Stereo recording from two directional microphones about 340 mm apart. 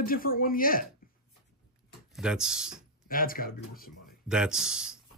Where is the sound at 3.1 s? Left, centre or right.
Left.